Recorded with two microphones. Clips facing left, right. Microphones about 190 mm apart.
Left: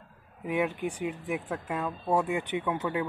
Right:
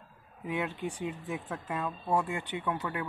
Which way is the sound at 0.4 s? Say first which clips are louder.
Left 5 dB; 15° left (ahead or behind).